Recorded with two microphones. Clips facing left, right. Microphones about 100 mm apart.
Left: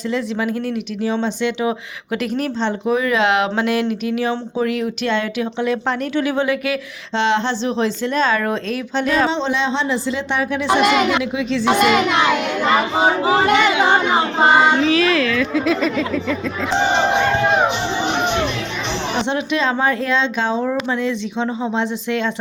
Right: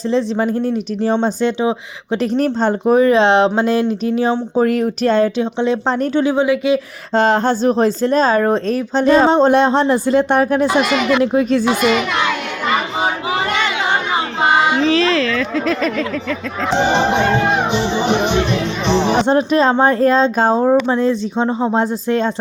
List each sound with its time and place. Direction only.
0.1 s speech: 35° right (ahead or behind)
4.5 s speech: 45° right (ahead or behind); by 6.7 s 15° right (ahead or behind)
7.2 s a woman's voice: 45° right (ahead or behind)
11.6 s a child's voice: 60° left (ahead or behind)
14.7 s speech: 5° left (ahead or behind)
19.2 s speech: 40° right (ahead or behind)